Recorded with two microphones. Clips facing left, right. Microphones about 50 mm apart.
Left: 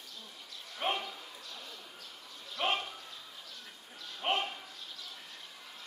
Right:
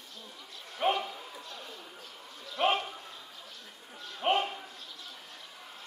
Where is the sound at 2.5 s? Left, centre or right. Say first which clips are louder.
Right 5 dB; centre.